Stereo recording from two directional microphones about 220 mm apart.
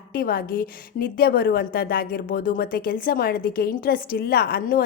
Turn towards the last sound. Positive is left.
turn(degrees=40)  # may be behind; listen again after turning